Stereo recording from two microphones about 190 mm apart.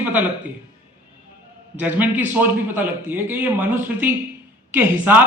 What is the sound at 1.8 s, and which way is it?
A man's voice, 10° right (ahead or behind).